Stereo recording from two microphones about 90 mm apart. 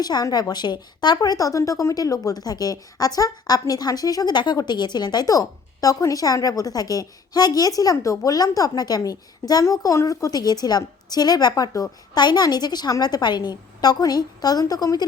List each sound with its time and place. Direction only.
0.0 s a woman's voice: 45° left (ahead or behind)